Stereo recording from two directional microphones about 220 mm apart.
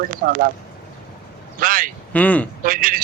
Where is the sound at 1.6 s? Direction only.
40° right (ahead or behind).